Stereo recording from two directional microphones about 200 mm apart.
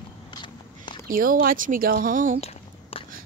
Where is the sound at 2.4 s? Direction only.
30° left (ahead or behind).